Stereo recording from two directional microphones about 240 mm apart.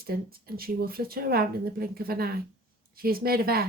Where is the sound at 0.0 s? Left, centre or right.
Right.